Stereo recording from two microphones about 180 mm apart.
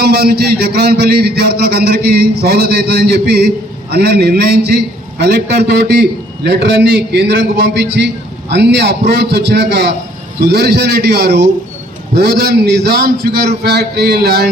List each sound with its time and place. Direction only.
0.0 s a man's voice: 60° right (ahead or behind)